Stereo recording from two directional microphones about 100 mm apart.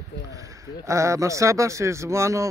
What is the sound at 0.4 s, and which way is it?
Speech, 30° right (ahead or behind).